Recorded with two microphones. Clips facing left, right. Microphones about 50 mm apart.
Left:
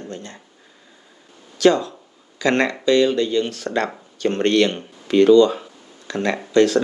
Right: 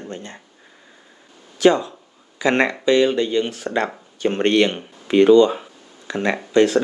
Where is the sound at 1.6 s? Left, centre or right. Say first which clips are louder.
Even; centre.